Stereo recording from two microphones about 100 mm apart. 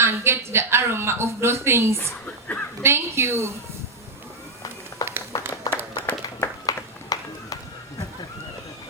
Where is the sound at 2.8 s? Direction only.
25° right (ahead or behind).